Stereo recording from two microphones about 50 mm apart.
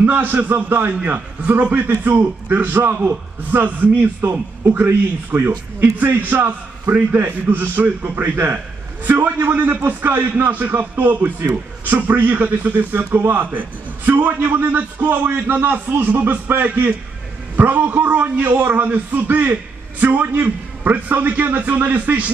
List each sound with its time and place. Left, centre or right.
0.1 s a man's voice: right
2.0 s a man's voice: right
4.2 s a man's voice: right
4.7 s a man's voice: right
16.6 s a man's voice: right